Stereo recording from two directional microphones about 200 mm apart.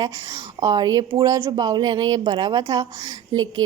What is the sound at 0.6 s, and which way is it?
A woman's voice, 20° right (ahead or behind).